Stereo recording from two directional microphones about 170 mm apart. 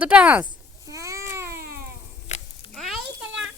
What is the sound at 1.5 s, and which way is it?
Cat, 60° right (ahead or behind).